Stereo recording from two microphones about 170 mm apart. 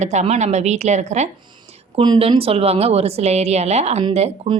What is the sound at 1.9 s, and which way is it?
A woman's voice, 30° right (ahead or behind).